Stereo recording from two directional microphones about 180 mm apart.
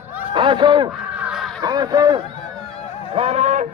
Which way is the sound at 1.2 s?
5° right (ahead or behind).